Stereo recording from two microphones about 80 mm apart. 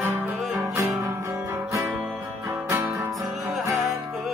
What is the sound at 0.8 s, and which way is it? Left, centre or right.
Music, right.